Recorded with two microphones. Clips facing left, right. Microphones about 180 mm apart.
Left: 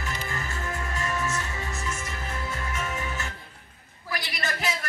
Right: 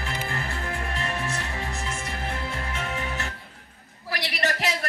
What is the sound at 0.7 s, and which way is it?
Music, 60° right (ahead or behind).